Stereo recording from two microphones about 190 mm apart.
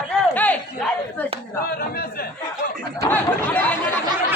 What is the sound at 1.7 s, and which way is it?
Speech, 50° left (ahead or behind).